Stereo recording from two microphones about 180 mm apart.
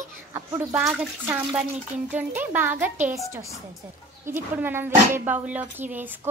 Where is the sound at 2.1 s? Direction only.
10° right (ahead or behind).